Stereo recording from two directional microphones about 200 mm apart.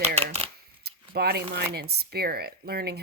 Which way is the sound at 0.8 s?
50° right (ahead or behind).